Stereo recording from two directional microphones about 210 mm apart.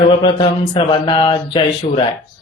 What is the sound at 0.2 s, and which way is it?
Speech, 20° left (ahead or behind).